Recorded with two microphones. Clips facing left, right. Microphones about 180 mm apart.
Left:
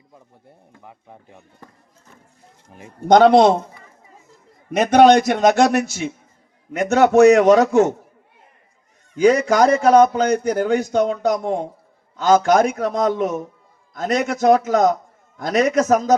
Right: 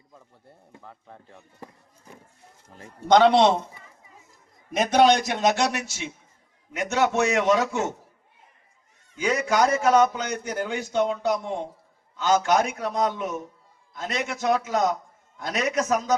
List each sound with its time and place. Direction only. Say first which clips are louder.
0.8 s speech: left 3 dB; 15° left (ahead or behind)
2.6 s speech: left 4 dB; 15° left (ahead or behind)
3.1 s a man's voice: left 6 dB; 45° left (ahead or behind)
4.8 s a man's voice: left 7 dB; 60° left (ahead or behind)
9.1 s a man's voice: left 9 dB; 40° left (ahead or behind)